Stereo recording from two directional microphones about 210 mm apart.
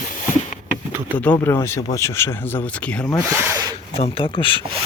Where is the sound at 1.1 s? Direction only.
10° left (ahead or behind).